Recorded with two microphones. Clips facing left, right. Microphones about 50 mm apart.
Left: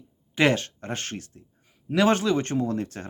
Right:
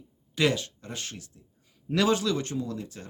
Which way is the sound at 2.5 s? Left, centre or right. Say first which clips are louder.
Left 7 dB; left.